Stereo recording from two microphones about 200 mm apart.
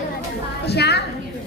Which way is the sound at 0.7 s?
55° left (ahead or behind).